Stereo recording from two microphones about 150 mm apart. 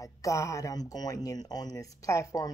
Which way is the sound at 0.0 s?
20° left (ahead or behind).